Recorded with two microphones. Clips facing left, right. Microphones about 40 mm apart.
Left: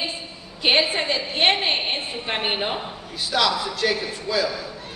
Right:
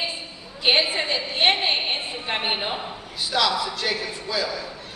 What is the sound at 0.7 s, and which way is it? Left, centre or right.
A woman's voice, left.